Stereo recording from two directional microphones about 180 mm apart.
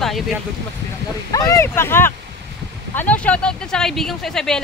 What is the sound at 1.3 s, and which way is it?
Speech, 20° left (ahead or behind).